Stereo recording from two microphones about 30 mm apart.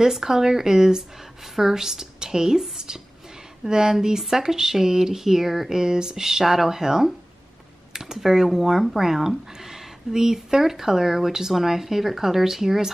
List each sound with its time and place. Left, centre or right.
0.0 s speech: centre
3.6 s speech: right; by 5.8 s centre
5.8 s speech: right